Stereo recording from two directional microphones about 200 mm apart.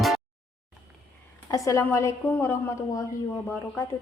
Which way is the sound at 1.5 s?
15° left (ahead or behind).